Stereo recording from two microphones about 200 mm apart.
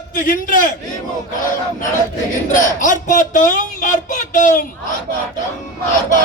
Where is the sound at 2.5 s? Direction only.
40° left (ahead or behind).